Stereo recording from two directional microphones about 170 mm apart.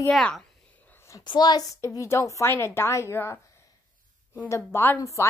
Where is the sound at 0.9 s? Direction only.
20° left (ahead or behind).